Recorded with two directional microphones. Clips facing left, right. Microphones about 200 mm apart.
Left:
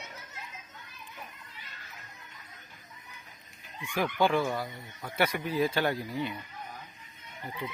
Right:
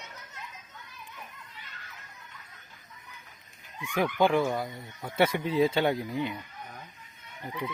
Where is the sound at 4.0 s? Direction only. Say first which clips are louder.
Right 2 dB; 20° right (ahead or behind).